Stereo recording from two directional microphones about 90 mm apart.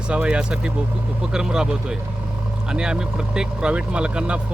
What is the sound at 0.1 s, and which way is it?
Speech, 15° right (ahead or behind).